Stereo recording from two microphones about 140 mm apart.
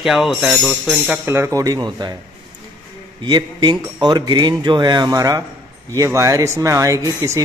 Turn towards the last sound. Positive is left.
turn(degrees=-20)  # may be behind; listen again after turning